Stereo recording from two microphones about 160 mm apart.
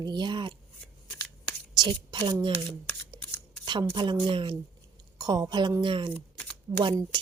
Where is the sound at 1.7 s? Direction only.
25° right (ahead or behind).